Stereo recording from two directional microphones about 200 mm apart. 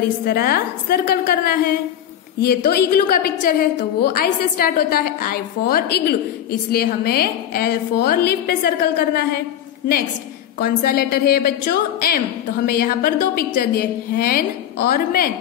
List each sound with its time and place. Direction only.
0.2 s a woman's voice: 50° left (ahead or behind)
10.6 s a woman's voice: 50° left (ahead or behind)